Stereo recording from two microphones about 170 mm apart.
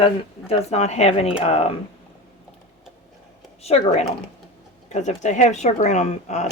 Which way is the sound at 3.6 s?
35° left (ahead or behind).